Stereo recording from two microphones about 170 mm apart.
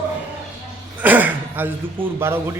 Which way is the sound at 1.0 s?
10° right (ahead or behind).